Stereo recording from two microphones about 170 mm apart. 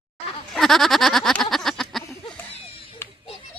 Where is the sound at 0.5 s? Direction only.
Centre (ahead or behind).